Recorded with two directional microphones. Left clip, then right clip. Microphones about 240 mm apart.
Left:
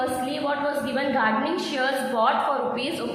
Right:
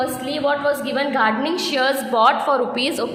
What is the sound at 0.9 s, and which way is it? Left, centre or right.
A woman's voice, right.